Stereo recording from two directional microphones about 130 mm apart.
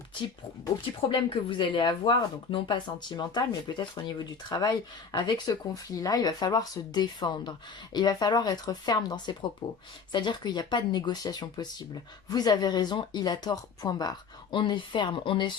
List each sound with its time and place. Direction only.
1.0 s speech: 40° left (ahead or behind)